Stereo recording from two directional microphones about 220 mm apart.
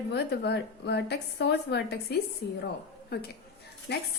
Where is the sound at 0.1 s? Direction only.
50° left (ahead or behind).